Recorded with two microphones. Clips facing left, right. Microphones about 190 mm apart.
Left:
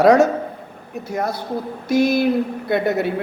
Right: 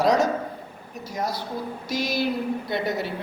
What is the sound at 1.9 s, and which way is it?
Speech, 55° left (ahead or behind).